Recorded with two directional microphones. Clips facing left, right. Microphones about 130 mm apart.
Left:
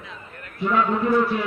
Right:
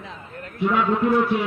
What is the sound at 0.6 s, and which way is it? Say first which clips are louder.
Speech: right 1 dB; 10° right (ahead or behind).